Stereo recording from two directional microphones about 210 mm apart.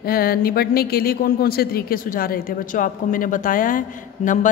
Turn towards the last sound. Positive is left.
turn(degrees=40)  # may be behind; listen again after turning